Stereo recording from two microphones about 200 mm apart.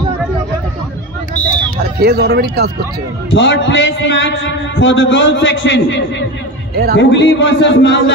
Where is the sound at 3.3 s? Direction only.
65° left (ahead or behind).